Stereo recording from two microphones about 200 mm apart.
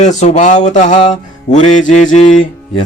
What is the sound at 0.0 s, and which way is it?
Speech, 35° left (ahead or behind).